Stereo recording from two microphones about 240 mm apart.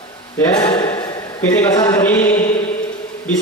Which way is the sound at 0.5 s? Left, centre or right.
Centre.